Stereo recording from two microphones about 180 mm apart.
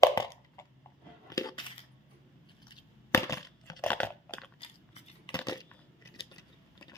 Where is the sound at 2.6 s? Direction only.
15° left (ahead or behind).